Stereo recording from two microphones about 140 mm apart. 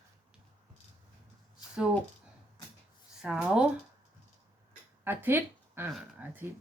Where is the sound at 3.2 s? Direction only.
5° right (ahead or behind).